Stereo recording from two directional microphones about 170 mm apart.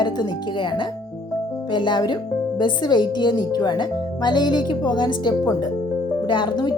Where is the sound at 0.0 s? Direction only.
25° left (ahead or behind).